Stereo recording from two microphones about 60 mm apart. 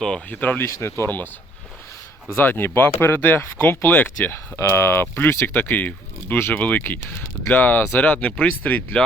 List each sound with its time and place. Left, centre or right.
0.3 s speech: left
0.6 s speech: left
2.3 s speech: left